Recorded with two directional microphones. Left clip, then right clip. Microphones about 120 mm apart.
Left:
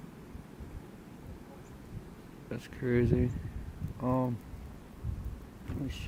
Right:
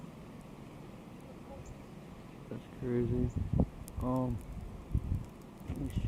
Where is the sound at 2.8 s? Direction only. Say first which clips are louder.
Left 5 dB; 45° left (ahead or behind).